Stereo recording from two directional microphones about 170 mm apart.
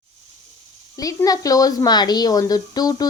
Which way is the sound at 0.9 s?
20° left (ahead or behind).